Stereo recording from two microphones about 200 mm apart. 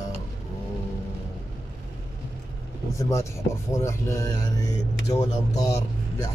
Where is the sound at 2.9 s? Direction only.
15° left (ahead or behind).